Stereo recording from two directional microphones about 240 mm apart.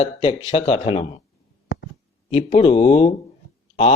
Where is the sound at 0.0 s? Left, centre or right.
Left.